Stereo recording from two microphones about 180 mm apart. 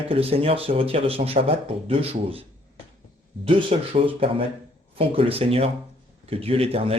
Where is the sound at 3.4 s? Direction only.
30° right (ahead or behind).